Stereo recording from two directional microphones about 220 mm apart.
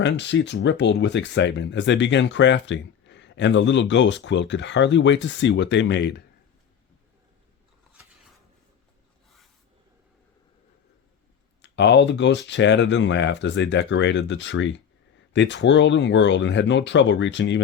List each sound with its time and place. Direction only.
0.0 s speech: 55° left (ahead or behind)
11.6 s speech: 50° left (ahead or behind)